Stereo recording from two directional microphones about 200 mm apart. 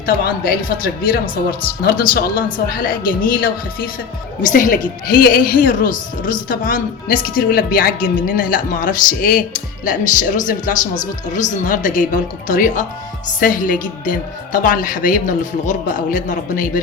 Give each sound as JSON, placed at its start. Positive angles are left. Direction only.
{"t": 0.0, "sound": "a man's voice", "side_deg": 45}